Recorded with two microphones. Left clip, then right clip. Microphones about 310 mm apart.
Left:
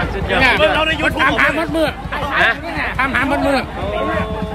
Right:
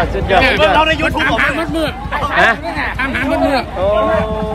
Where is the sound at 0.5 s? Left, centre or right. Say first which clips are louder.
Right 3 dB; centre.